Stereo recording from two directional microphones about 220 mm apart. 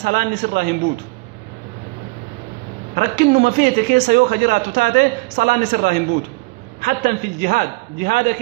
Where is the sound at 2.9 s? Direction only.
40° right (ahead or behind).